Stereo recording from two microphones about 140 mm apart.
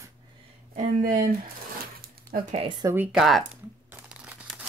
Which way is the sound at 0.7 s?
70° right (ahead or behind).